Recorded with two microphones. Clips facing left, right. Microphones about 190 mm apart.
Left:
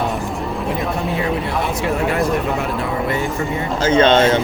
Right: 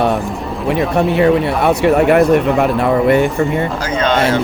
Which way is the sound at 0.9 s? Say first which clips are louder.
Right 9 dB; 70° right (ahead or behind).